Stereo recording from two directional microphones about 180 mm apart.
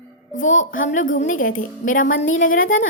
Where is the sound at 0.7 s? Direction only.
45° left (ahead or behind).